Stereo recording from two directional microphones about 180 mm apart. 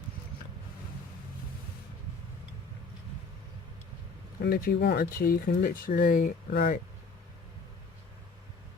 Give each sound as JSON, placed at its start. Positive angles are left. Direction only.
{"t": 4.4, "sound": "speech", "side_deg": 55}